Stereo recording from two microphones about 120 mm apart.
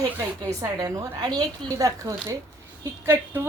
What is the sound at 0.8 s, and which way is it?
A woman's voice, 35° right (ahead or behind).